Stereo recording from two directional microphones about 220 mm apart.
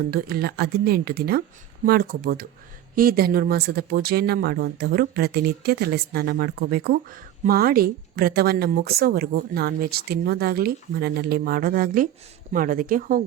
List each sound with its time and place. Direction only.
0.1 s speech: 45° right (ahead or behind)